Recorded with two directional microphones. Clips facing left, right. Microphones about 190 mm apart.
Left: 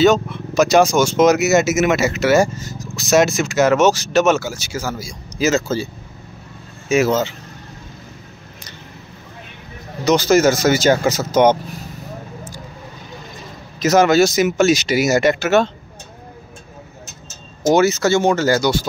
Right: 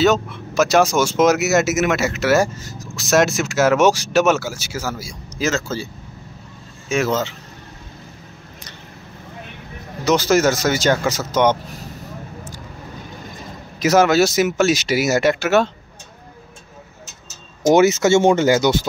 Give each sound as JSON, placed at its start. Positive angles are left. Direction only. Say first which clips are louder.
{"t": 0.0, "sound": "speech", "louder": "left 3 dB", "side_deg": -5}
{"t": 5.5, "sound": "speech", "louder": "left 5 dB", "side_deg": 15}
{"t": 6.9, "sound": "speech", "louder": "left 4 dB", "side_deg": 5}
{"t": 10.0, "sound": "speech", "louder": "left 2 dB", "side_deg": 0}
{"t": 13.7, "sound": "speech", "louder": "left 1 dB", "side_deg": -5}
{"t": 17.6, "sound": "speech", "louder": "right 1 dB", "side_deg": -20}